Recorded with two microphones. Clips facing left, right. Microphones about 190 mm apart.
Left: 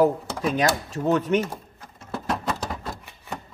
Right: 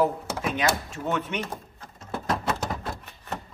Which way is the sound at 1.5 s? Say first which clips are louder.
Even; 10° left (ahead or behind).